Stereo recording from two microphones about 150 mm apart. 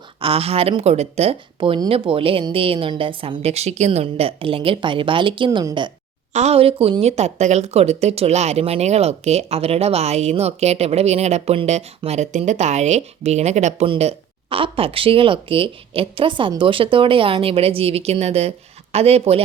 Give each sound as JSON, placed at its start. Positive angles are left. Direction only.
{"t": 0.2, "sound": "speech", "side_deg": -40}
{"t": 6.3, "sound": "a woman's voice", "side_deg": -45}
{"t": 13.8, "sound": "speech", "side_deg": -40}